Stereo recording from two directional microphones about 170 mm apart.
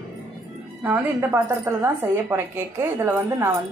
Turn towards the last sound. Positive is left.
turn(degrees=-15)  # may be behind; listen again after turning